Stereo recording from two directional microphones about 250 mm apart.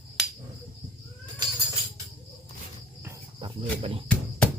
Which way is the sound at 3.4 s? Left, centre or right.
Right.